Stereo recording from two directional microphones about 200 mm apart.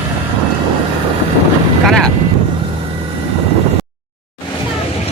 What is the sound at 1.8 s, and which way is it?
Speech, centre (ahead or behind).